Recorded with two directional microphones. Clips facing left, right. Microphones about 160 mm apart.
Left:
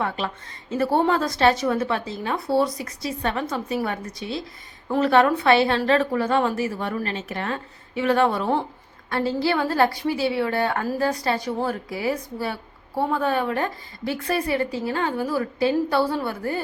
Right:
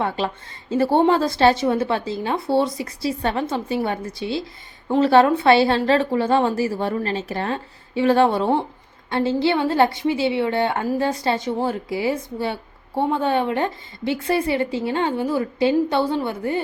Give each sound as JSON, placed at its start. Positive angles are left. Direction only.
{"t": 0.7, "sound": "speech", "side_deg": -30}